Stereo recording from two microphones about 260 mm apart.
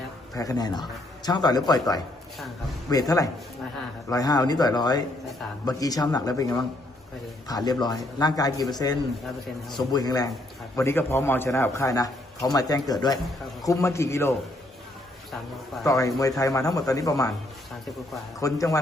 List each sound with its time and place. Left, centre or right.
0.3 s a man's voice: centre
2.9 s a man's voice: centre
15.8 s a man's voice: centre
18.3 s a man's voice: centre